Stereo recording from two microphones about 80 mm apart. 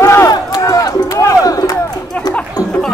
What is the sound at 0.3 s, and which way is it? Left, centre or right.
Crowd, left.